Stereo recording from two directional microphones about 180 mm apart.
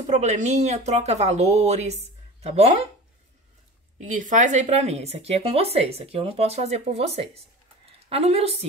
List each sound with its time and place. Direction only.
0.0 s speech: 40° right (ahead or behind)
4.0 s speech: 45° right (ahead or behind)